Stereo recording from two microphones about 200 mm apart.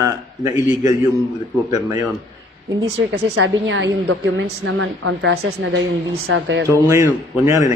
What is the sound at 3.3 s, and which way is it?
Speech, 70° right (ahead or behind).